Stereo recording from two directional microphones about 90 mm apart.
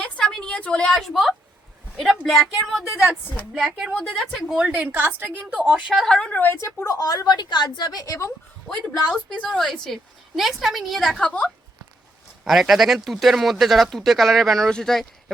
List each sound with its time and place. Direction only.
0.3 s a woman's voice: 10° left (ahead or behind)
3.6 s a woman's voice: 10° right (ahead or behind)
5.9 s a woman's voice: centre (ahead or behind); by 6.6 s 20° left (ahead or behind)
6.8 s a woman's voice: 40° left (ahead or behind)
9.0 s speech: 5° left (ahead or behind)
12.5 s speech: centre (ahead or behind)